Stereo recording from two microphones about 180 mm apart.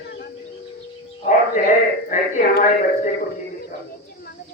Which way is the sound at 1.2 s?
45° left (ahead or behind).